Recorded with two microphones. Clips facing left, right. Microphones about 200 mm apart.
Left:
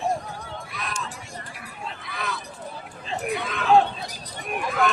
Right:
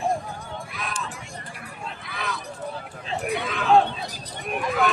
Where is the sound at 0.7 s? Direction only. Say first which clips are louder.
Left 1 dB; centre (ahead or behind).